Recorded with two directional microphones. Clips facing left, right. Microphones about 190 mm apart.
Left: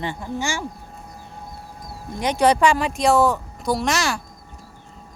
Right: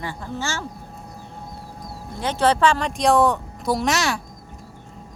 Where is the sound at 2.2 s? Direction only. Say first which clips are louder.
Left 2 dB; 15° left (ahead or behind); by 4.2 s centre (ahead or behind).